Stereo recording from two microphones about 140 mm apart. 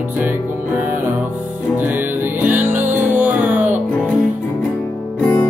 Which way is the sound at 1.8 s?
15° right (ahead or behind).